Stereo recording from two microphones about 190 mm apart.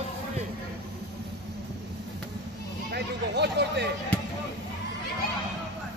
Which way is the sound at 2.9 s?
60° right (ahead or behind).